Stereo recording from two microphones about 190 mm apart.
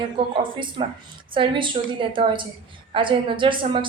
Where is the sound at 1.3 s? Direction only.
25° right (ahead or behind).